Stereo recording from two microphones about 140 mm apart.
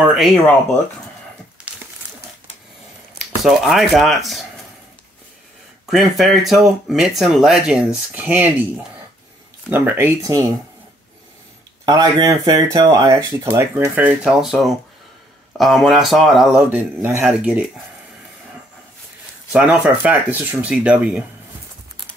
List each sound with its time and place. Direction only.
1.6 s crumpling: 5° right (ahead or behind)
3.4 s speech: centre (ahead or behind)
5.9 s speech: centre (ahead or behind)
9.7 s speech: 15° right (ahead or behind)
11.8 s speech: 30° right (ahead or behind); by 16.6 s centre (ahead or behind)
16.6 s speech: 15° right (ahead or behind)
19.5 s speech: 5° right (ahead or behind)